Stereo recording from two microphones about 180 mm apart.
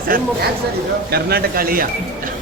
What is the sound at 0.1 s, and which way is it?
Speech, 50° right (ahead or behind).